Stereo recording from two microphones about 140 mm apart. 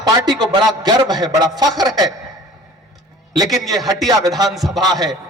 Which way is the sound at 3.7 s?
25° right (ahead or behind).